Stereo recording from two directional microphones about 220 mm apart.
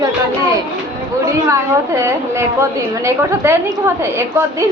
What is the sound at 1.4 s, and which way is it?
A woman's voice, 15° right (ahead or behind).